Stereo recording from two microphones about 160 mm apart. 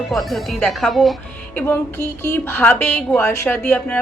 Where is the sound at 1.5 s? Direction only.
15° left (ahead or behind).